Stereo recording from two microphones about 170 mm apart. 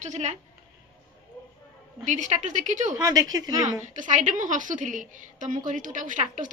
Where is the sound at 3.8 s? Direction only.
50° right (ahead or behind).